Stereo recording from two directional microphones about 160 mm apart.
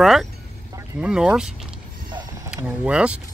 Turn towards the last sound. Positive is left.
turn(degrees=-5)  # may be behind; listen again after turning